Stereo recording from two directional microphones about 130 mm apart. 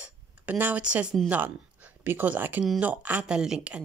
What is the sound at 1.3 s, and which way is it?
Speech, 15° right (ahead or behind).